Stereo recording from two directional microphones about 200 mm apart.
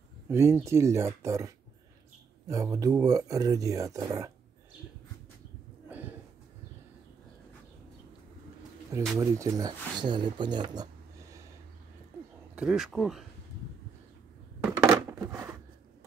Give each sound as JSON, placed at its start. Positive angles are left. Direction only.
{"t": 0.3, "sound": "speech", "side_deg": -15}
{"t": 9.2, "sound": "speech", "side_deg": -15}
{"t": 12.5, "sound": "speech", "side_deg": 0}
{"t": 14.6, "sound": "a sound", "side_deg": -15}